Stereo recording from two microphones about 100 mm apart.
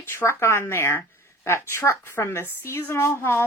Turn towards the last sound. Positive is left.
turn(degrees=25)  # may be behind; listen again after turning